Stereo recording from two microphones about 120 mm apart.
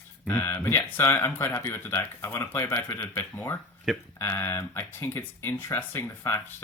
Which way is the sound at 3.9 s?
Centre (ahead or behind).